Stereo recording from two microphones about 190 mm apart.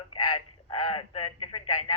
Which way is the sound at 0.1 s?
30° left (ahead or behind).